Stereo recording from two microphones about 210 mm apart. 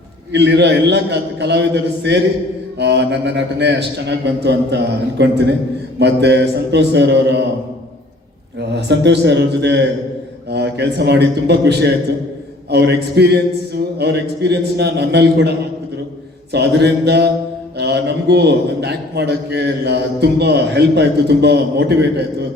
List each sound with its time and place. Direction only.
0.3 s a man's voice: 55° right (ahead or behind)
8.7 s a man's voice: 55° right (ahead or behind)